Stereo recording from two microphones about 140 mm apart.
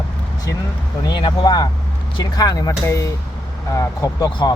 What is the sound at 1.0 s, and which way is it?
Speech, 30° left (ahead or behind).